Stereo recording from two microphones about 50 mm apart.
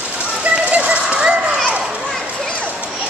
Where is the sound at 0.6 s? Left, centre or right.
Right.